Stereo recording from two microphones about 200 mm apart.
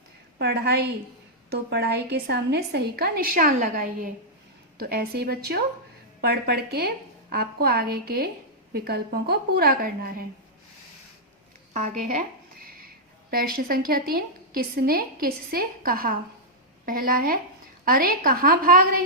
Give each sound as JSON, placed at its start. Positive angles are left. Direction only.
{"t": 0.3, "sound": "a woman's voice", "side_deg": -55}
{"t": 11.7, "sound": "speech", "side_deg": -35}
{"t": 13.3, "sound": "a woman's voice", "side_deg": -50}